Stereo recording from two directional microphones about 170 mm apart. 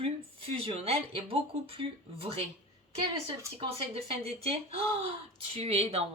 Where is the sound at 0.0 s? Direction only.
35° right (ahead or behind).